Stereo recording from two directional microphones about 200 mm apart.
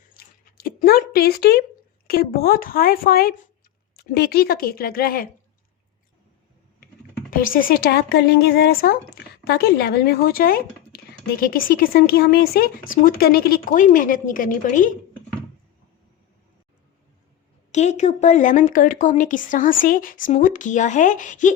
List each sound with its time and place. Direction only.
0.2 s a sound: 50° left (ahead or behind)
2.0 s speech: 50° left (ahead or behind)
7.3 s speech: 45° left (ahead or behind)
17.7 s speech: 35° left (ahead or behind)